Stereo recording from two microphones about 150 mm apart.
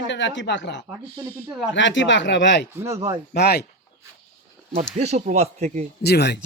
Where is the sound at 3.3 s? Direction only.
90° left.